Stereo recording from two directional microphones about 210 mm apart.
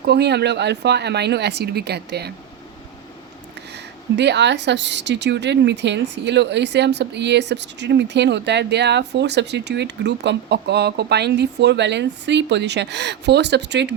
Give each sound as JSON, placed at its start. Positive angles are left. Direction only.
{"t": 0.0, "sound": "speech", "side_deg": -50}
{"t": 3.7, "sound": "speech", "side_deg": -55}